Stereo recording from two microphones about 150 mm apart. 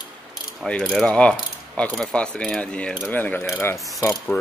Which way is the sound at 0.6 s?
5° left (ahead or behind).